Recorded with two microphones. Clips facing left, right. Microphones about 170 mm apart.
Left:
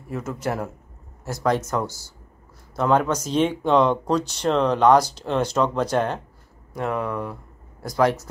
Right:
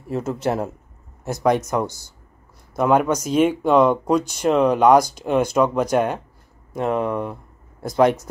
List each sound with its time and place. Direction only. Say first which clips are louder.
0.1 s speech: right 5 dB; 30° right (ahead or behind); by 6.2 s 10° right (ahead or behind)
6.7 s speech: right 4 dB; 20° right (ahead or behind)